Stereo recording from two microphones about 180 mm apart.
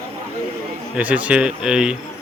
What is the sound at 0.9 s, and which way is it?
Speech, 10° right (ahead or behind).